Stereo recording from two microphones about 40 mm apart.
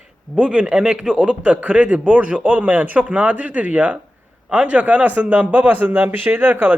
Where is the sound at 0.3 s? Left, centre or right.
Right.